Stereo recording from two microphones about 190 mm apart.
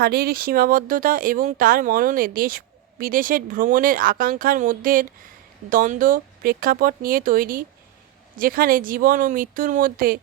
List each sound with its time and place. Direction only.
0.0 s speech: 55° right (ahead or behind)